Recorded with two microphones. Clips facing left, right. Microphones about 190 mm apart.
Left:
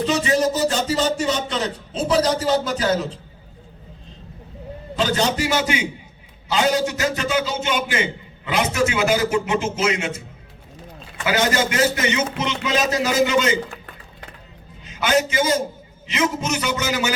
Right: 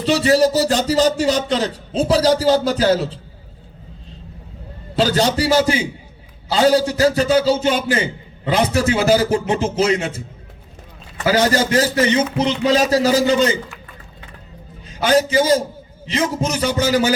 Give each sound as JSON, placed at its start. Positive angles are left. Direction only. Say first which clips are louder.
{"t": 0.0, "sound": "a man's voice", "louder": "right 5 dB", "side_deg": -35}
{"t": 4.9, "sound": "a man's voice", "louder": "right 4 dB", "side_deg": -35}
{"t": 14.8, "sound": "a man's voice", "louder": "right 4 dB", "side_deg": -35}